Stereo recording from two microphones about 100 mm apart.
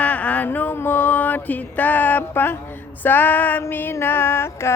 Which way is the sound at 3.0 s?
20° left (ahead or behind).